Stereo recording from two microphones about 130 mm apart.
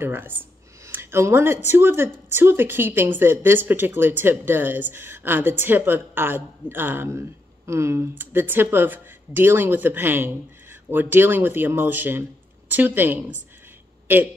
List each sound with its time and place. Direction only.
0.0 s speech: 15° right (ahead or behind)